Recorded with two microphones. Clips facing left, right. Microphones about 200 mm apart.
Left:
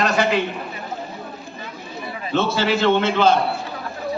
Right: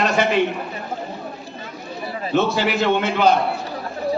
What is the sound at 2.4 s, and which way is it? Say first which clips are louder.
Speech: even; 15° right (ahead or behind).